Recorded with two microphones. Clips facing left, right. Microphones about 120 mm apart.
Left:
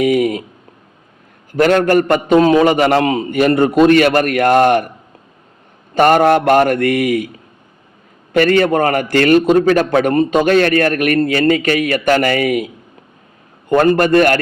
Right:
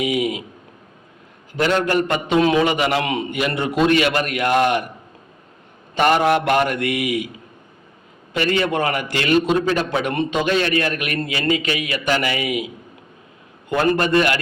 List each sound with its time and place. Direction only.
0.0 s a man's voice: 50° left (ahead or behind)
1.5 s a man's voice: 50° left (ahead or behind)
5.9 s a man's voice: 45° left (ahead or behind)
8.3 s a man's voice: 50° left (ahead or behind)